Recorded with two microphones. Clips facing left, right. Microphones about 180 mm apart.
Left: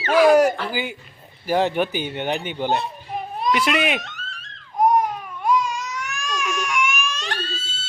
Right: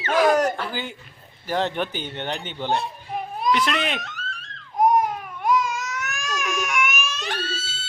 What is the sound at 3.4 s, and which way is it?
Baby cry, 5° left (ahead or behind).